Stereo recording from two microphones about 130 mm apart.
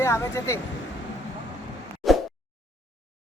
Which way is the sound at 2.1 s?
Centre (ahead or behind).